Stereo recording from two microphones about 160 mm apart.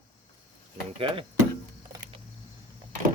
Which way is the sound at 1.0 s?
35° right (ahead or behind).